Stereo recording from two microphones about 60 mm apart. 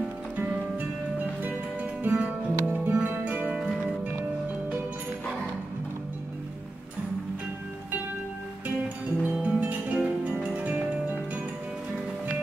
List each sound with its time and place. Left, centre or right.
1.4 s music: right
8.8 s music: right
10.5 s music: right